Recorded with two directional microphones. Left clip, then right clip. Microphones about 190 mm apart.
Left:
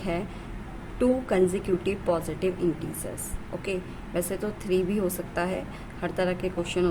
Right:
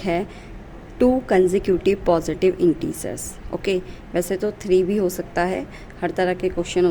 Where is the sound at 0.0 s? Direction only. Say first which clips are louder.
Right 8 dB; 30° right (ahead or behind).